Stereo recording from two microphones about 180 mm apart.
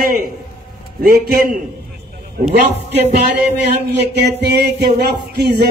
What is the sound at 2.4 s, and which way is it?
Speech, 35° right (ahead or behind).